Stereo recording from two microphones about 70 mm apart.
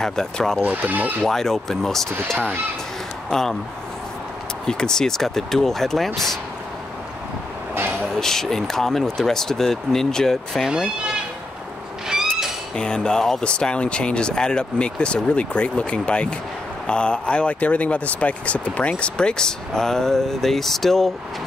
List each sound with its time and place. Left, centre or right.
0.0 s speech: centre
0.6 s speech: right
1.2 s speech: centre
4.6 s speech: centre
8.2 s speech: centre
10.6 s speech: centre
12.1 s a sound: centre
12.7 s speech: centre